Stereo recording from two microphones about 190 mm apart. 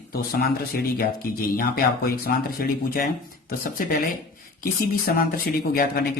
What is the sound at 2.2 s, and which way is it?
Speech, 50° left (ahead or behind).